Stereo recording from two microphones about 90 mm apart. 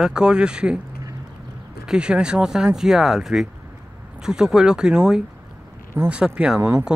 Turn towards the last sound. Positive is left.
turn(degrees=-25)  # may be behind; listen again after turning